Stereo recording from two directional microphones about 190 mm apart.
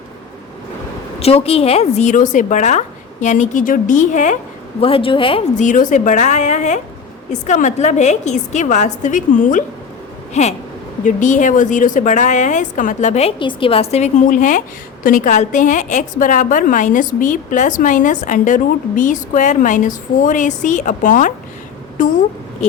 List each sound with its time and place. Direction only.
1.2 s a woman's voice: 30° left (ahead or behind)
4.8 s a woman's voice: 30° left (ahead or behind)